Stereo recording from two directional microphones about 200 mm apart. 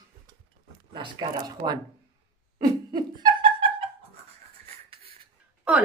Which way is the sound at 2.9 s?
20° right (ahead or behind).